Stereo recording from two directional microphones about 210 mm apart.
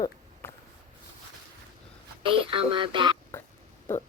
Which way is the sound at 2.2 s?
25° right (ahead or behind).